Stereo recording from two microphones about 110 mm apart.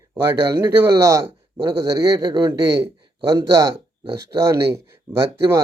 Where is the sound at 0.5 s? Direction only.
30° right (ahead or behind).